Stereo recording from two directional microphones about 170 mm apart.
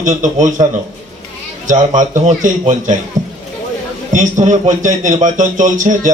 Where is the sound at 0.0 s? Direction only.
50° right (ahead or behind).